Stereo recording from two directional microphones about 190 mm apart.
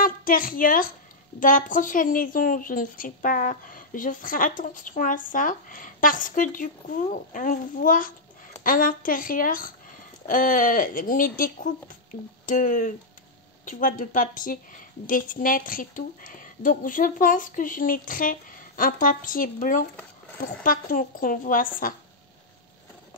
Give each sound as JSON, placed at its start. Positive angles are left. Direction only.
{"t": 0.0, "sound": "a woman's voice", "side_deg": 50}